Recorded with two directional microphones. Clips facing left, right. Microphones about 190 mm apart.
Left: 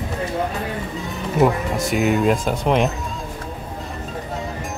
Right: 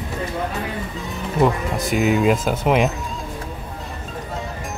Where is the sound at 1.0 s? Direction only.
Centre (ahead or behind).